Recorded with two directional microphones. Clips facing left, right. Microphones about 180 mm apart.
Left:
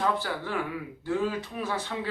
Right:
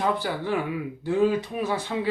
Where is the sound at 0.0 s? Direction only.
15° right (ahead or behind).